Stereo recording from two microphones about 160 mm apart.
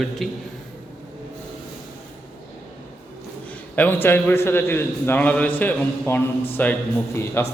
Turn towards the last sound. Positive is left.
turn(degrees=15)  # may be behind; listen again after turning